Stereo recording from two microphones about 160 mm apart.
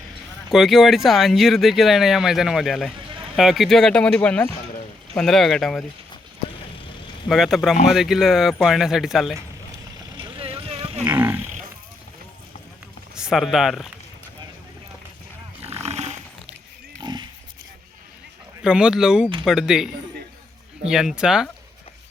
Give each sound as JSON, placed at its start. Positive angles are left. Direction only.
{"t": 0.5, "sound": "speech", "side_deg": 0}
{"t": 7.3, "sound": "speech", "side_deg": 0}
{"t": 10.2, "sound": "vehicle", "side_deg": -35}
{"t": 11.0, "sound": "livestock", "side_deg": -15}
{"t": 13.1, "sound": "speech", "side_deg": -5}
{"t": 15.6, "sound": "a sound", "side_deg": -40}
{"t": 17.0, "sound": "pig", "side_deg": -30}
{"t": 18.6, "sound": "speech", "side_deg": -5}